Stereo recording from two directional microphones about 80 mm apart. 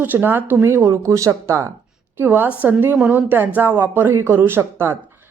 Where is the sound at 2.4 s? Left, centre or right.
Centre; by 4.9 s right.